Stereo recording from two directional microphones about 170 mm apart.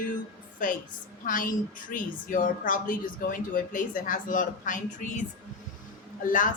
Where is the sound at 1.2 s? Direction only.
50° left (ahead or behind).